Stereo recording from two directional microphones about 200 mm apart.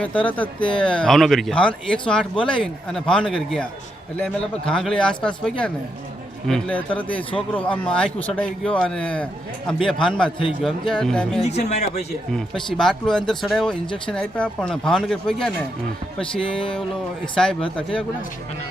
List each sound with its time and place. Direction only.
0.0 s speech: 5° left (ahead or behind)
11.4 s speech: 35° left (ahead or behind)
12.3 s speech: centre (ahead or behind)
17.3 s speech: 5° left (ahead or behind)